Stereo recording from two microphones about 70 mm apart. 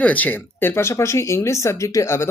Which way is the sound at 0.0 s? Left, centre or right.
Left.